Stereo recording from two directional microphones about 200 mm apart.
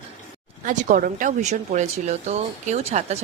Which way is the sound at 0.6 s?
40° right (ahead or behind).